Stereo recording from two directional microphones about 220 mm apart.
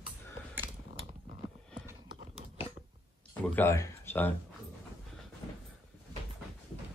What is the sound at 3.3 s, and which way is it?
Speech, 10° left (ahead or behind).